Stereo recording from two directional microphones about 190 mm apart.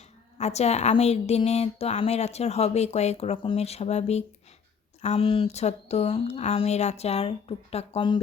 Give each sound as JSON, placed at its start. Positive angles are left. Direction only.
{"t": 0.3, "sound": "speech", "side_deg": 35}